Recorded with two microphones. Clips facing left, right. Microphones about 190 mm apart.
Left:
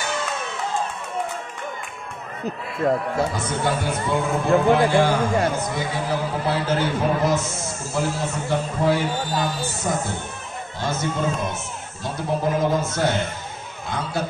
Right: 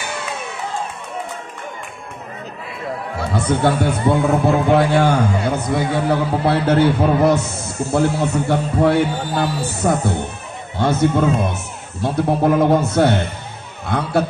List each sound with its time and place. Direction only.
3.3 s speech: 65° right (ahead or behind)